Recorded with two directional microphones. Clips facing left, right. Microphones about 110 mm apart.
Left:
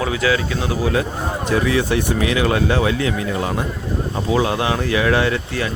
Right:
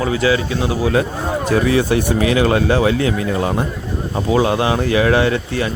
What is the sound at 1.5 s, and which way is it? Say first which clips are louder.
Speech: right 3 dB; 35° right (ahead or behind).